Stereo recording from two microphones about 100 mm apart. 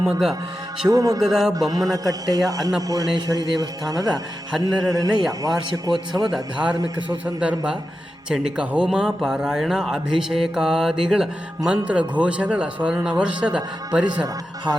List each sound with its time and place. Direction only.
0.1 s a man's voice: 5° right (ahead or behind)
0.9 s a man's voice: 35° right (ahead or behind)
1.2 s a man's voice: 5° right (ahead or behind)
1.5 s a man's voice: 35° right (ahead or behind)
6.3 s speech: 10° right (ahead or behind)
6.7 s a man's voice: 40° right (ahead or behind)
8.3 s speech: 10° right (ahead or behind)
14.7 s speech: 10° right (ahead or behind)